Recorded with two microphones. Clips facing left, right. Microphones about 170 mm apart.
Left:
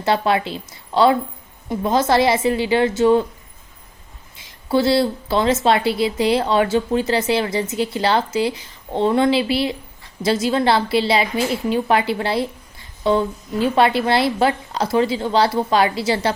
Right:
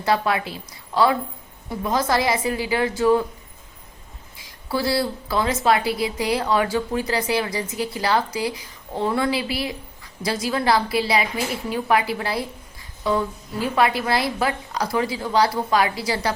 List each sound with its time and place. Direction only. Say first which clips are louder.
0.0 s speech: left 3 dB; 25° left (ahead or behind)
4.4 s speech: left 7 dB; 25° left (ahead or behind)